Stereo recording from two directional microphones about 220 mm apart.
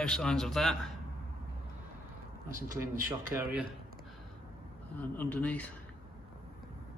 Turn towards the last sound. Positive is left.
turn(degrees=5)  # may be behind; listen again after turning